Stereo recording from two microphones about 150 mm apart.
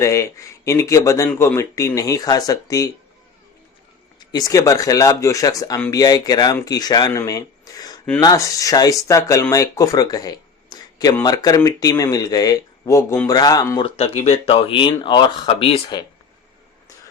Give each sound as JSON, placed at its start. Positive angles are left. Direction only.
{"t": 0.0, "sound": "speech", "side_deg": 20}
{"t": 4.2, "sound": "speech", "side_deg": 25}
{"t": 13.8, "sound": "speech", "side_deg": 40}